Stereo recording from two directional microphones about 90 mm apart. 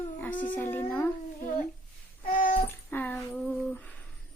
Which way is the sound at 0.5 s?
20° left (ahead or behind).